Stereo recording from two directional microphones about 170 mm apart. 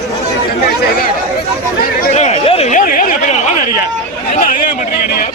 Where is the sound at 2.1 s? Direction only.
40° left (ahead or behind).